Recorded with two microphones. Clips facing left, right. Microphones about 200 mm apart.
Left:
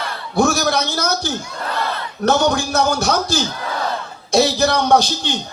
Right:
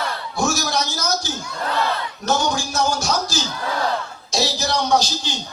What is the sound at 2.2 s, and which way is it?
A man's voice, 60° left (ahead or behind).